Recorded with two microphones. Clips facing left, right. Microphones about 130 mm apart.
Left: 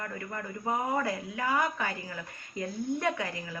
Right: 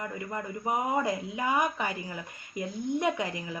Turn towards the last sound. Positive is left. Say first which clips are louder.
# right 2 dB
turn(degrees=-20)  # may be behind; listen again after turning